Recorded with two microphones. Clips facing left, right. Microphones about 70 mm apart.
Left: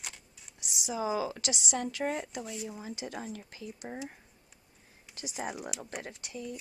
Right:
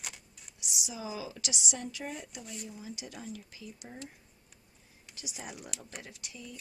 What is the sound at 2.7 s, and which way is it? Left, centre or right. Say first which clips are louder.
Speech: left 5 dB; left.